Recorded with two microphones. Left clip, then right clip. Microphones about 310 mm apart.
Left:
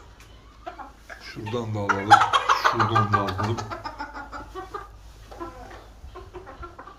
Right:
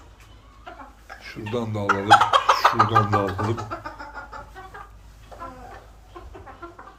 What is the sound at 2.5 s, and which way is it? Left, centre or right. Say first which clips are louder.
Speech: right 3 dB; centre.